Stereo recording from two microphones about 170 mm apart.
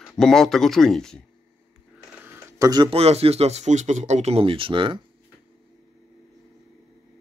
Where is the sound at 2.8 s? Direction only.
35° right (ahead or behind).